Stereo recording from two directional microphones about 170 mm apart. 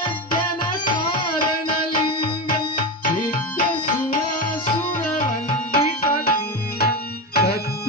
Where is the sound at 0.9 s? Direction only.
30° left (ahead or behind).